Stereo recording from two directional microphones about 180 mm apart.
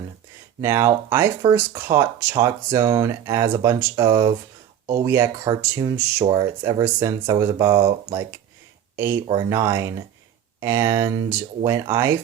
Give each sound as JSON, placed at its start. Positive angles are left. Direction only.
{"t": 0.6, "sound": "speech", "side_deg": -15}
{"t": 9.0, "sound": "speech", "side_deg": -15}